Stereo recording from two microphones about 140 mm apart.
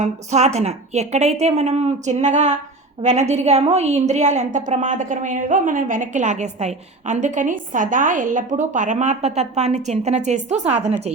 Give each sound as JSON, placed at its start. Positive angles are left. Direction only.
{"t": 0.0, "sound": "a woman's voice", "side_deg": -55}